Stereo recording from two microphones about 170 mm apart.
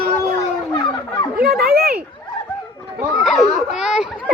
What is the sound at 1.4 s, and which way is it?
Children playing, 65° right (ahead or behind).